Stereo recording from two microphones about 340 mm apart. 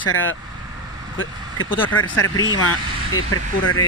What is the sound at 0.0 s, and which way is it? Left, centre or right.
Speech, left.